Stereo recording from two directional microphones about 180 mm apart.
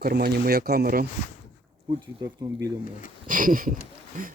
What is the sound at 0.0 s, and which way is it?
Speech, 65° right (ahead or behind).